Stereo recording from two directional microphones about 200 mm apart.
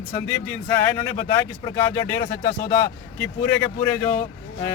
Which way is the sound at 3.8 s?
10° left (ahead or behind).